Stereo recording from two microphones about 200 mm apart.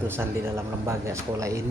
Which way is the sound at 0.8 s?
15° right (ahead or behind).